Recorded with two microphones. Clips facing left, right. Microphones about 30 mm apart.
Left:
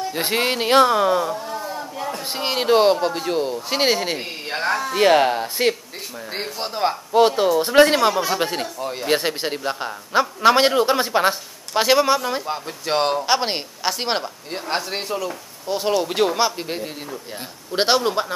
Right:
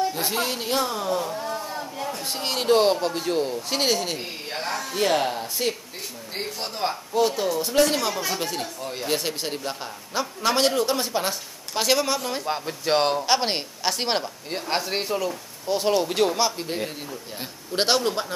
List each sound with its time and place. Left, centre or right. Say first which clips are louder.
0.1 s speech: left 5 dB; left
1.4 s a sound: left 2 dB; centre
2.0 s speech: left 5 dB; centre
4.5 s speech: left 8 dB; left
4.9 s a man's voice: left 7 dB; left
7.1 s a man's voice: left 7 dB; left; by 12.4 s centre
12.4 s speech: even; centre
17.7 s speech: left 4 dB; centre